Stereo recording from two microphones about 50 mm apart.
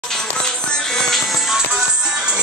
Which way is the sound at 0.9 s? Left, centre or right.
Centre.